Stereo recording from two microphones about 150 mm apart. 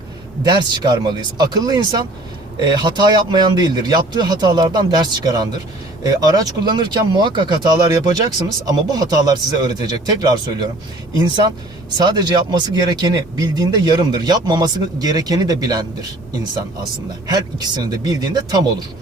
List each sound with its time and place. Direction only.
0.4 s speech: 30° right (ahead or behind)